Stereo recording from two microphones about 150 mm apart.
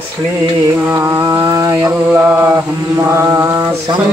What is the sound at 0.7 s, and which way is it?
Mantra, 15° right (ahead or behind).